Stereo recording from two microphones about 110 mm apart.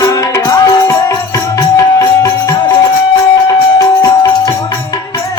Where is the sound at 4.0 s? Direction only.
30° left (ahead or behind).